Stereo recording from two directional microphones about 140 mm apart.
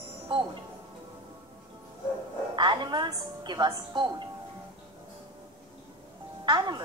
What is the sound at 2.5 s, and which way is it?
A woman's voice, 35° right (ahead or behind).